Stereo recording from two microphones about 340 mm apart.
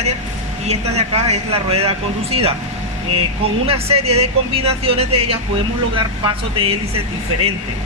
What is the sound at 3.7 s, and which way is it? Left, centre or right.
Speech, centre.